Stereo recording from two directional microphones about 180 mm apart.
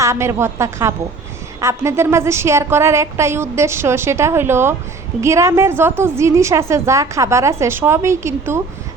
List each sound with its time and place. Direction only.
0.0 s a woman's voice: 15° right (ahead or behind)